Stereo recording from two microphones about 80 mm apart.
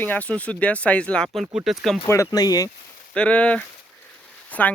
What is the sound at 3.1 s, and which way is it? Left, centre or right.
Speech, centre.